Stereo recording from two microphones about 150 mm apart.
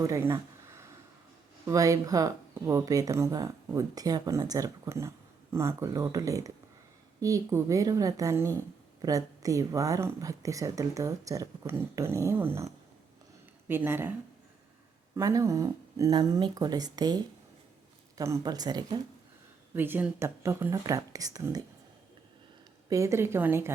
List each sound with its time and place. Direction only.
0.0 s a sound: 20° right (ahead or behind)
1.6 s speech: 20° right (ahead or behind)
15.1 s speech: 20° right (ahead or behind)
18.2 s speech: 20° right (ahead or behind)
19.7 s speech: 15° right (ahead or behind)
22.9 s speech: 20° right (ahead or behind)